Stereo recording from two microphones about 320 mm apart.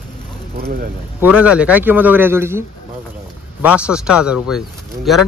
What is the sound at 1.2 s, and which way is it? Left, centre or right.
Speech, centre.